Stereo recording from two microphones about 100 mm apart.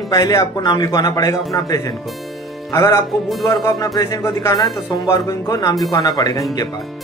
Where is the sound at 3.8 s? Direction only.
40° left (ahead or behind).